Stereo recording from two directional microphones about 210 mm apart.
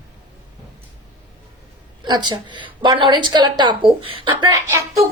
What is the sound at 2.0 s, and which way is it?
A woman's voice, 20° right (ahead or behind).